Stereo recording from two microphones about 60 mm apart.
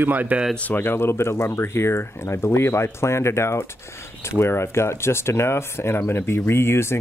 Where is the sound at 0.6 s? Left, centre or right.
Left.